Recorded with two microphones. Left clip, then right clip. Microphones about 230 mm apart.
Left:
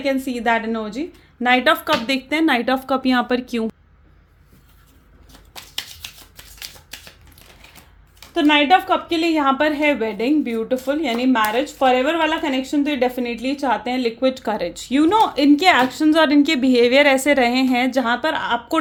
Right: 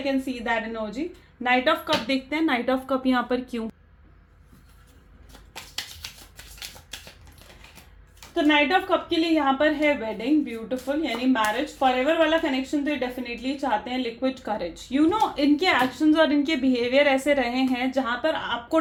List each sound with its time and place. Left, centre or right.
0.0 s a woman's voice: left
6.9 s typewriter: left
8.4 s a woman's voice: left